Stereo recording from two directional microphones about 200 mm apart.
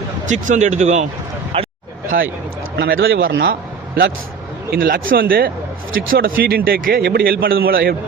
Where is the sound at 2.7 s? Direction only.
70° right (ahead or behind).